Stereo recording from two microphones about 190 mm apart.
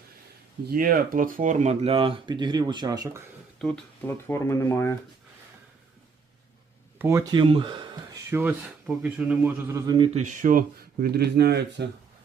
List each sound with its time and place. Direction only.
0.7 s speech: 50° right (ahead or behind); by 3.2 s 20° right (ahead or behind)
3.6 s speech: 5° left (ahead or behind)
7.0 s speech: 15° right (ahead or behind)
8.3 s speech: 10° right (ahead or behind)
10.2 s speech: 45° right (ahead or behind); by 11.9 s 60° right (ahead or behind)